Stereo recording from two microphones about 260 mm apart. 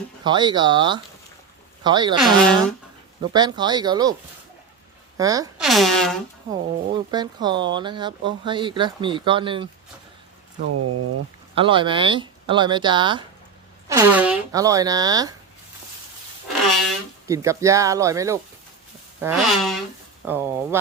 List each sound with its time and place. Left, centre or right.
0.3 s speech: centre
2.2 s speech: centre
3.3 s speech: centre
5.1 s speech: centre
5.5 s speech: centre
6.5 s speech: centre
10.6 s speech: right
11.5 s speech: centre
17.2 s speech: centre